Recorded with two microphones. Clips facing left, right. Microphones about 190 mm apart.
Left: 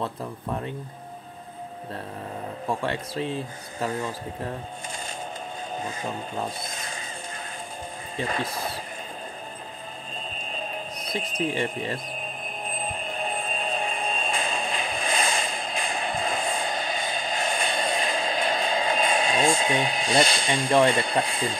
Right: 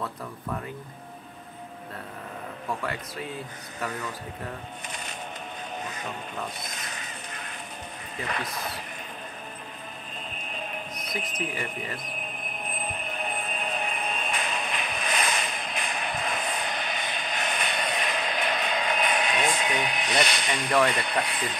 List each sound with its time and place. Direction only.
2.8 s speech: 30° left (ahead or behind)
5.8 s speech: 30° left (ahead or behind)
8.2 s speech: 30° left (ahead or behind)
10.4 s a sound: 30° left (ahead or behind)